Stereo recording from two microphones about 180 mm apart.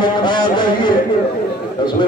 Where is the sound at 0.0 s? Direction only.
25° left (ahead or behind).